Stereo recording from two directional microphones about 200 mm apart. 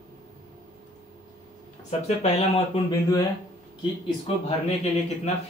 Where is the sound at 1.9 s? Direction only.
30° left (ahead or behind).